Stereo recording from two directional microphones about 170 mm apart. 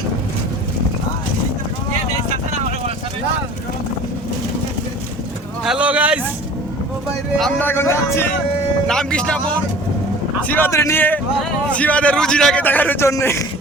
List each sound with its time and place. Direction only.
5.6 s vehicle: 5° right (ahead or behind)
7.3 s speech: centre (ahead or behind)
7.7 s a man's voice: 15° left (ahead or behind)
8.9 s speech: 5° left (ahead or behind)
10.5 s a man's voice: 15° left (ahead or behind)